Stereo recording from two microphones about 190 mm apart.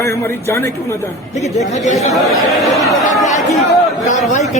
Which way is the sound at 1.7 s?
35° left (ahead or behind).